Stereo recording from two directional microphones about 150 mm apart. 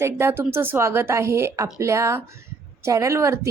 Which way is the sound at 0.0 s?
15° right (ahead or behind).